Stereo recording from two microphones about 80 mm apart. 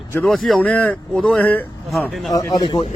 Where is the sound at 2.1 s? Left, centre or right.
Centre.